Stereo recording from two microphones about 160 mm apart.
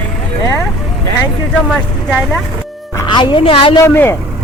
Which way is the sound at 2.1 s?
5° right (ahead or behind).